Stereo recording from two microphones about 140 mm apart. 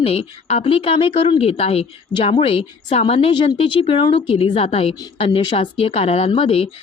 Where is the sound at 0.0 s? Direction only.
45° left (ahead or behind).